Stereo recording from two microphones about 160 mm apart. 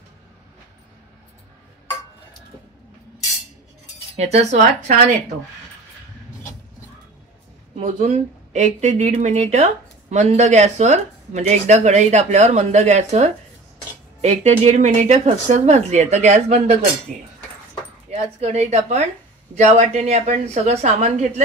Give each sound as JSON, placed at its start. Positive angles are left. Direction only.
{"t": 4.2, "sound": "speech", "side_deg": -40}
{"t": 7.8, "sound": "speech", "side_deg": -45}
{"t": 18.1, "sound": "speech", "side_deg": -45}